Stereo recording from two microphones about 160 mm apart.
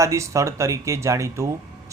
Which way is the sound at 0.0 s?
20° right (ahead or behind).